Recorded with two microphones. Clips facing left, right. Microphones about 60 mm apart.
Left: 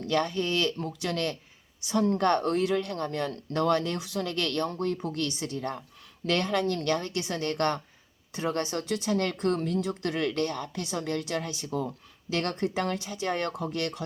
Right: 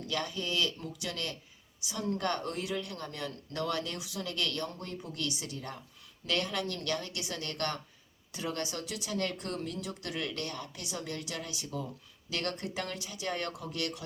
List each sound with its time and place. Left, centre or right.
0.0 s speech: left